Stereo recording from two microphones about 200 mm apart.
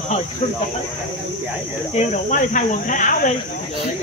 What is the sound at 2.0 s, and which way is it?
Speech, 40° left (ahead or behind).